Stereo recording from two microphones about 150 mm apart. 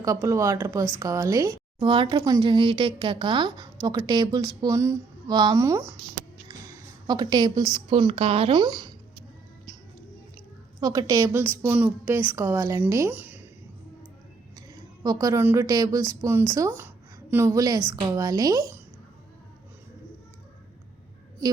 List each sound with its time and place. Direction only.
0.0 s speech: 20° right (ahead or behind)
1.8 s speech: 35° right (ahead or behind); by 5.9 s 20° right (ahead or behind)
7.1 s speech: 30° right (ahead or behind)
7.9 s speech: 40° right (ahead or behind)
8.6 s speech: 25° right (ahead or behind)
10.8 s a woman's voice: 25° right (ahead or behind)
15.0 s speech: 25° right (ahead or behind)